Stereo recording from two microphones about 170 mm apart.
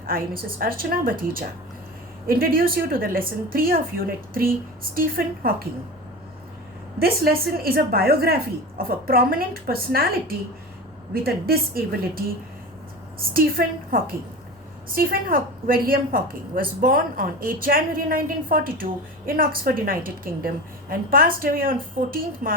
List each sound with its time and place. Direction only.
0.0 s a woman's voice: 60° right (ahead or behind)
7.0 s a woman's voice: 65° right (ahead or behind)